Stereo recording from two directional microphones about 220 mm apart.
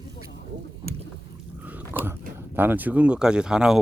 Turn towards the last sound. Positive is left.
turn(degrees=-5)  # may be behind; listen again after turning